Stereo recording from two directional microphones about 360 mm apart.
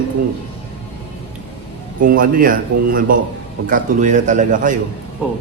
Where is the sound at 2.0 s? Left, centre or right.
Right.